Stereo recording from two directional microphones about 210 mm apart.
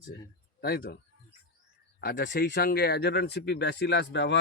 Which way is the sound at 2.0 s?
50° left (ahead or behind).